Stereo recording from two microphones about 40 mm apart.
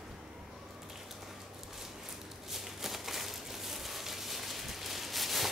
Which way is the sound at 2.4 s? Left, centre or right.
Centre.